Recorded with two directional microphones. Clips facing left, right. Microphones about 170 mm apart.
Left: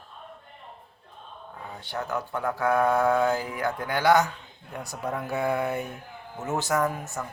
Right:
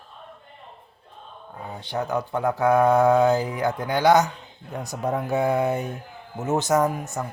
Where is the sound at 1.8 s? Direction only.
20° right (ahead or behind).